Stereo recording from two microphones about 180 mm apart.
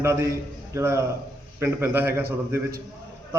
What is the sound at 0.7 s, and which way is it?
A man's voice, 15° right (ahead or behind).